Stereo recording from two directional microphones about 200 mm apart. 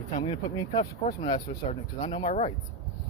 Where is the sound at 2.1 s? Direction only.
30° left (ahead or behind).